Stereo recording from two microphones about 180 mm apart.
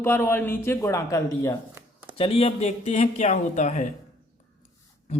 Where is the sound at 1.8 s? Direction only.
15° right (ahead or behind).